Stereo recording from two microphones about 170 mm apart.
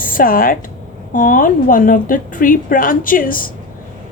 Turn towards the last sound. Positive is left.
turn(degrees=55)  # may be behind; listen again after turning